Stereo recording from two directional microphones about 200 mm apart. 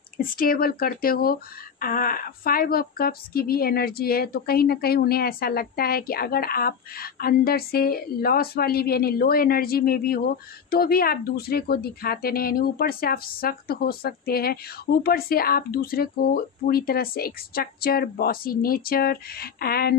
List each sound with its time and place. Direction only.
0.2 s speech: 45° left (ahead or behind)